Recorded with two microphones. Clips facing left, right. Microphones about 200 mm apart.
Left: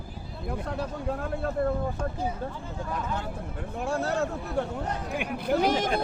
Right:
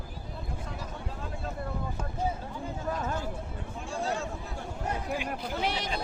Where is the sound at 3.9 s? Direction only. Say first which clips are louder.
Left 5 dB; 60° left (ahead or behind).